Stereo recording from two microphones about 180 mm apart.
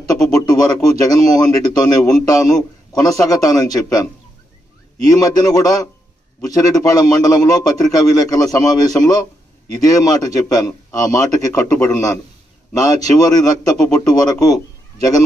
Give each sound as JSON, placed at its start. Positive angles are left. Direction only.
{"t": 0.0, "sound": "a man's voice", "side_deg": 20}